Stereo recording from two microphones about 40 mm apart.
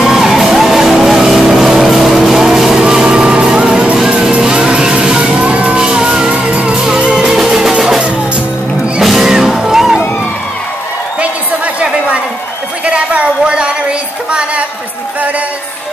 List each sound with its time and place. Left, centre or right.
0.0 s music: centre
2.3 s vehicle: centre
2.8 s vehicle: centre
3.4 s music: centre
6.2 s music: right
7.2 s music: centre
9.0 s music: centre
11.1 s a sound: right